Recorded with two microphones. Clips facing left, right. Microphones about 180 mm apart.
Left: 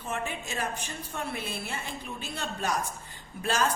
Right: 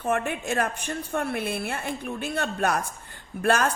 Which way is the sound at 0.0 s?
55° right (ahead or behind).